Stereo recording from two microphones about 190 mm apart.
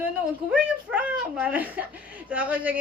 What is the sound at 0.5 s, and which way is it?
A woman's voice, 5° right (ahead or behind).